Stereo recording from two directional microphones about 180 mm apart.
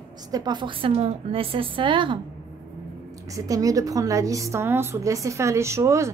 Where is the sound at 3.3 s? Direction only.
20° right (ahead or behind).